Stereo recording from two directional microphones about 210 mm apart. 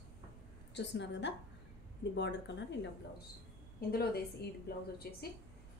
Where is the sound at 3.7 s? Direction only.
45° left (ahead or behind).